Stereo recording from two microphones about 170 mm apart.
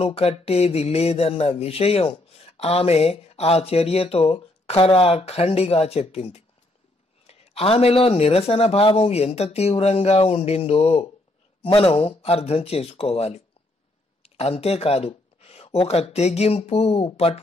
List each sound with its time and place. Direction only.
0.0 s speech: 35° left (ahead or behind)